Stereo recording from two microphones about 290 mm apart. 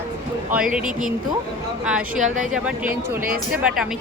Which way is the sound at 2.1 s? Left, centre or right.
Right.